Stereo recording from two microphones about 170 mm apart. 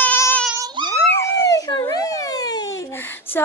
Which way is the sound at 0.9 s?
15° left (ahead or behind).